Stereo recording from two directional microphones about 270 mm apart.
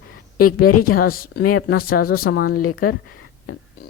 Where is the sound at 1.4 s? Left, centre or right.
Left.